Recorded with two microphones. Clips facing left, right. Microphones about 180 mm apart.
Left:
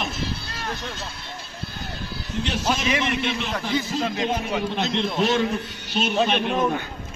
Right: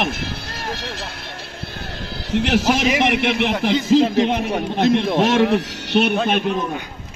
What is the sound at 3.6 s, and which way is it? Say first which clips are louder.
Speech: right 12 dB; 90° right.